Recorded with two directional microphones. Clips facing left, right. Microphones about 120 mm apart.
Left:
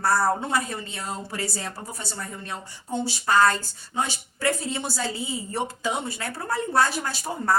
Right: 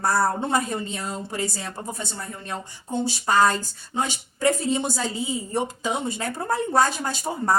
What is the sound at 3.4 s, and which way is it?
A woman's voice, 15° right (ahead or behind).